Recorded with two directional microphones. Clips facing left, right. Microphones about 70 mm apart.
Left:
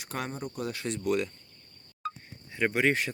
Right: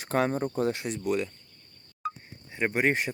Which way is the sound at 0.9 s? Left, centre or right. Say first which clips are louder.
Even; centre.